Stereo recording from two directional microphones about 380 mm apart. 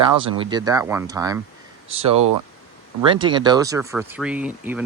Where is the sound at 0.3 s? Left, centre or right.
Centre.